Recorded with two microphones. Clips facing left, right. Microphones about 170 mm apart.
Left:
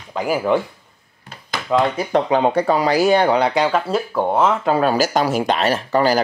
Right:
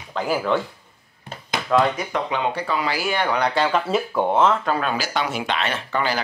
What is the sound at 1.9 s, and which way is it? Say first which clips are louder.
Speech: left 8 dB; 40° left (ahead or behind).